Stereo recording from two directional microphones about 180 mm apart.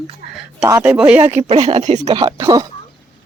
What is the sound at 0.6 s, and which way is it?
Speech, 15° right (ahead or behind).